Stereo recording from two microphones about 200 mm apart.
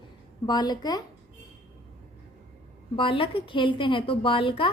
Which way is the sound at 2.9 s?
25° left (ahead or behind).